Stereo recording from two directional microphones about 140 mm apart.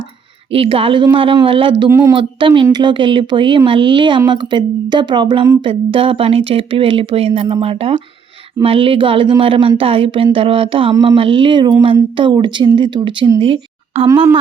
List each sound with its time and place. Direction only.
0.5 s speech: 40° right (ahead or behind)
1.9 s speech: 20° right (ahead or behind)
2.4 s a woman's voice: 35° right (ahead or behind)